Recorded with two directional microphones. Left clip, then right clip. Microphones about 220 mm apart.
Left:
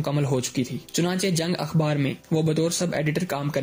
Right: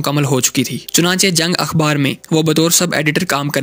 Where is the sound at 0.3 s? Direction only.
40° right (ahead or behind).